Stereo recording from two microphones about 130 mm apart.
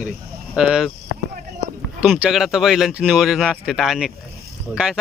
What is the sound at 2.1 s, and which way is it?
Speech, 5° right (ahead or behind).